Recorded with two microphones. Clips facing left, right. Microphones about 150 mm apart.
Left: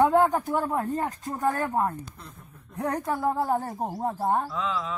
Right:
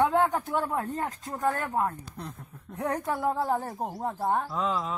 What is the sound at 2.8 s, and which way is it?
Speech, 20° left (ahead or behind).